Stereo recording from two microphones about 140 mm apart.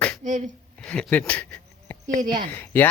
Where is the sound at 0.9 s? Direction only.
10° left (ahead or behind).